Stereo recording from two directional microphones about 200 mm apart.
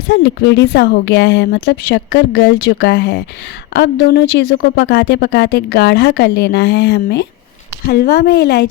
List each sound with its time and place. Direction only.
0.1 s speech: 60° left (ahead or behind)